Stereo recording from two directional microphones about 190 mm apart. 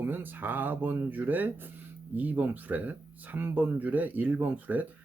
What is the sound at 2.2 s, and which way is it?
Speech, 10° right (ahead or behind).